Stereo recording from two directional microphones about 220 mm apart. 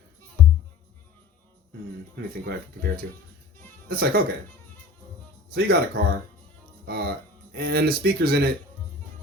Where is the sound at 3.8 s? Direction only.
45° right (ahead or behind).